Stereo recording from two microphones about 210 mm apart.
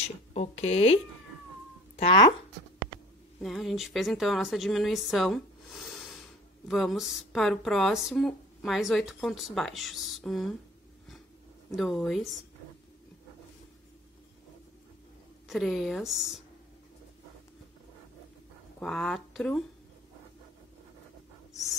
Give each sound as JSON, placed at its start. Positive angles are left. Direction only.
{"t": 0.0, "sound": "speech", "side_deg": 30}
{"t": 3.4, "sound": "speech", "side_deg": 0}
{"t": 11.7, "sound": "speech", "side_deg": 0}
{"t": 15.4, "sound": "speech", "side_deg": 0}
{"t": 18.8, "sound": "speech", "side_deg": 5}